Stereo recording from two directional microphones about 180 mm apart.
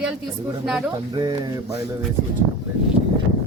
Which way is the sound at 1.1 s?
25° right (ahead or behind).